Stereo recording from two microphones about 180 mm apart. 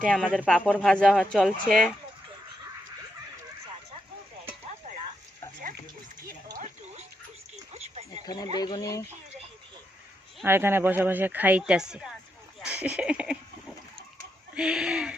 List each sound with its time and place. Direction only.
0.0 s speech: centre (ahead or behind)
7.7 s a sound: 35° right (ahead or behind)
8.2 s speech: 20° left (ahead or behind)
10.4 s speech: 10° right (ahead or behind)
14.5 s speech: 5° right (ahead or behind)